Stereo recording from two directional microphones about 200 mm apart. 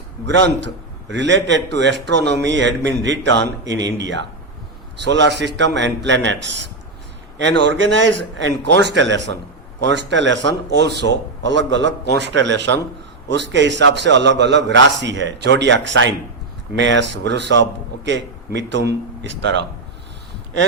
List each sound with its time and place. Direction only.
0.3 s a man's voice: 60° right (ahead or behind)
3.6 s speech: 20° right (ahead or behind)
3.9 s a man's voice: 60° right (ahead or behind)
7.7 s a man's voice: 65° right (ahead or behind)